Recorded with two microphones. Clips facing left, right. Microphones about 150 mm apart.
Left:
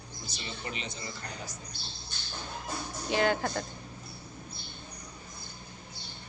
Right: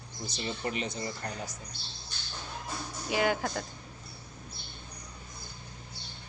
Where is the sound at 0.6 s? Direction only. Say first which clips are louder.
Right 5 dB; 45° right (ahead or behind).